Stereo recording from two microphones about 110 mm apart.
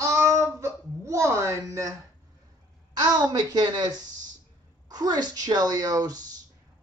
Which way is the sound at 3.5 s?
35° right (ahead or behind).